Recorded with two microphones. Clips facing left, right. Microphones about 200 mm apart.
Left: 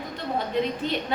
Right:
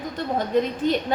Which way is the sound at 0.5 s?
45° right (ahead or behind).